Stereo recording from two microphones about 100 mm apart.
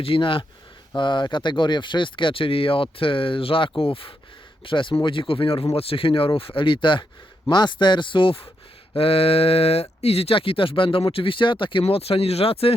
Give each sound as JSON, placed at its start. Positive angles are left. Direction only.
{"t": 0.0, "sound": "speech", "side_deg": 65}
{"t": 0.9, "sound": "speech", "side_deg": 50}
{"t": 9.0, "sound": "speech", "side_deg": 70}